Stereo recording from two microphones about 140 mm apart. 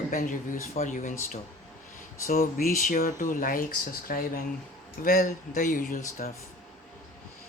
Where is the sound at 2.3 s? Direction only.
75° left (ahead or behind).